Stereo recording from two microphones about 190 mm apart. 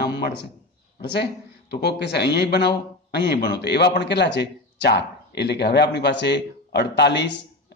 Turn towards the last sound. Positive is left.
turn(degrees=65)  # may be behind; listen again after turning